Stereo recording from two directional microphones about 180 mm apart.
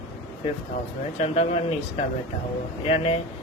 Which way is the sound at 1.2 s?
35° left (ahead or behind).